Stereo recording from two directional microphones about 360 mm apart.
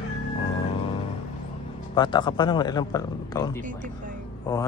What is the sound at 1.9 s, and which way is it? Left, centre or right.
Speech, centre.